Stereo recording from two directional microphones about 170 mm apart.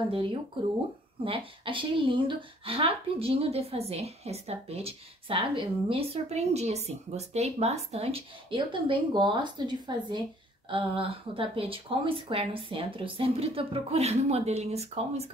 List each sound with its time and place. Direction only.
0.1 s a woman's voice: 30° right (ahead or behind)